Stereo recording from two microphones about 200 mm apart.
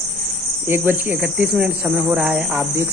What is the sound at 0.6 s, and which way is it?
Speech, 10° right (ahead or behind).